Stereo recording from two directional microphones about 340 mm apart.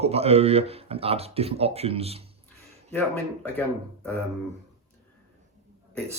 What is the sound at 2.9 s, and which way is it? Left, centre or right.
Speech, centre.